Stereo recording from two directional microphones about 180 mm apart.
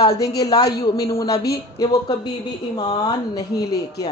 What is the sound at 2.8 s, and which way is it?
Speech, 20° left (ahead or behind).